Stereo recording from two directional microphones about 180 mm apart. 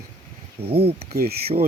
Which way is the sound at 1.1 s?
60° right (ahead or behind).